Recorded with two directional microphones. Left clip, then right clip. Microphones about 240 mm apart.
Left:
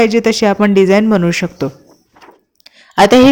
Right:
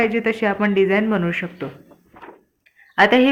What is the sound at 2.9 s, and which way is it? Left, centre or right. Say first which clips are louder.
Speech: left 7 dB; left.